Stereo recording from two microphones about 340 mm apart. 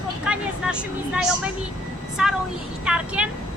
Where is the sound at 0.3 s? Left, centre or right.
Centre.